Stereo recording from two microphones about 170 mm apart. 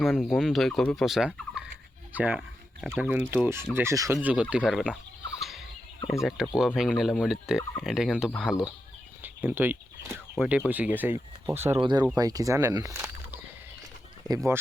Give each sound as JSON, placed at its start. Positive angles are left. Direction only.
{"t": 0.0, "sound": "turkey", "side_deg": 0}
{"t": 2.1, "sound": "speech", "side_deg": -10}
{"t": 5.4, "sound": "fowl", "side_deg": 0}
{"t": 6.4, "sound": "turkey", "side_deg": -5}
{"t": 9.2, "sound": "a sound", "side_deg": -10}
{"t": 10.3, "sound": "speech", "side_deg": -5}
{"t": 11.8, "sound": "speech", "side_deg": -25}
{"t": 14.3, "sound": "speech", "side_deg": -15}